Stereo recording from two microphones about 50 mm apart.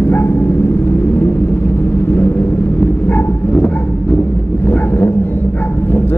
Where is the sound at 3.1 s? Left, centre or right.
Left.